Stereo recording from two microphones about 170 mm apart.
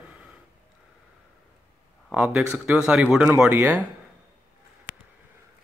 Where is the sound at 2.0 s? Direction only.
5° right (ahead or behind).